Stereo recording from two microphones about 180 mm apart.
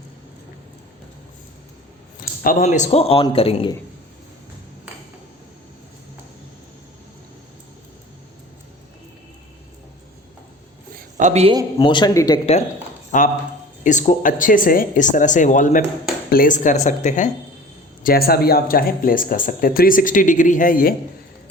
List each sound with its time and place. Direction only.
2.4 s a man's voice: 50° left (ahead or behind); by 3.7 s 30° left (ahead or behind)
11.2 s speech: 40° right (ahead or behind)
11.8 s speech: 25° left (ahead or behind)
13.1 s speech: 45° left (ahead or behind)
18.0 s speech: 55° left (ahead or behind)